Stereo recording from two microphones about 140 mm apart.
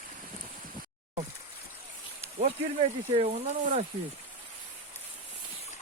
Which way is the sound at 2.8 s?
45° right (ahead or behind).